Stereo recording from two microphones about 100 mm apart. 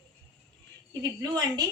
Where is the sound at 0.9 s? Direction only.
40° right (ahead or behind).